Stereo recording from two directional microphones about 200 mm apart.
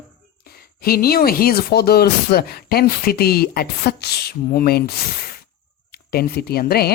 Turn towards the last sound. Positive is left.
turn(degrees=50)  # may be behind; listen again after turning